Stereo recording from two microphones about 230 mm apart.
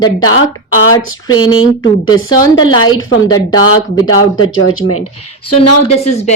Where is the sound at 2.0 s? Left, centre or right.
Centre.